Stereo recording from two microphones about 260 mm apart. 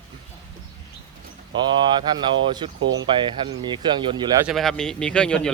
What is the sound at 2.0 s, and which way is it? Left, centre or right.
Speech, centre.